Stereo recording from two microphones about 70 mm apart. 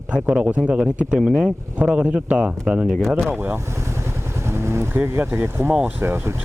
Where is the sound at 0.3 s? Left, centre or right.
Centre.